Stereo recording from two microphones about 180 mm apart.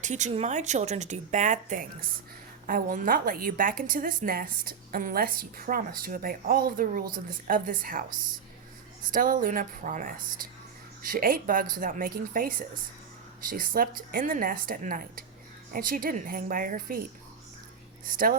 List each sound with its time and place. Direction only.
0.0 s a woman's voice: 40° right (ahead or behind)
9.1 s a woman's voice: 50° right (ahead or behind)
18.0 s a woman's voice: 50° right (ahead or behind)